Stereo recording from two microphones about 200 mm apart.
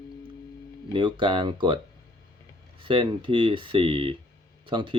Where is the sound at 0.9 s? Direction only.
25° right (ahead or behind).